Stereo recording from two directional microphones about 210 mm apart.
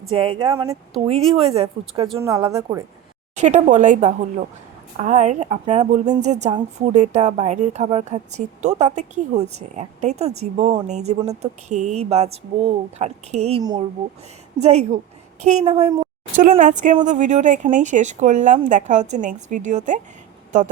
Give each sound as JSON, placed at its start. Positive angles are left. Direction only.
{"t": 0.2, "sound": "a woman's voice", "side_deg": -25}
{"t": 3.3, "sound": "a woman's voice", "side_deg": -35}
{"t": 13.6, "sound": "speech", "side_deg": -20}
{"t": 14.6, "sound": "a woman's voice", "side_deg": -30}
{"t": 15.7, "sound": "speech", "side_deg": -20}
{"t": 16.3, "sound": "a woman's voice", "side_deg": -40}